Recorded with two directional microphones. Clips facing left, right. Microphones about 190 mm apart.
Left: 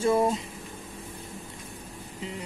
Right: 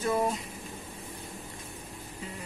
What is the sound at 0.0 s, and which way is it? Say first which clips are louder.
Speech: left 5 dB; 25° left (ahead or behind).